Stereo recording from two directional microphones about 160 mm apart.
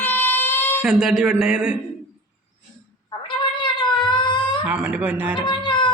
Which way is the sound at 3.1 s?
30° left (ahead or behind).